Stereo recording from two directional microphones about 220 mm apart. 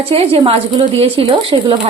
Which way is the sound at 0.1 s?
25° right (ahead or behind).